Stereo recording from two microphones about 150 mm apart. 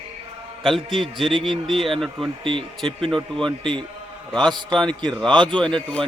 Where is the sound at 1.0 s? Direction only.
Centre (ahead or behind).